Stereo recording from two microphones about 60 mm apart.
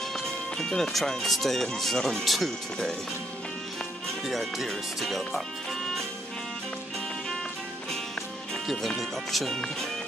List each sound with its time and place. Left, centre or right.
0.6 s speech: centre
4.3 s speech: centre
8.6 s speech: centre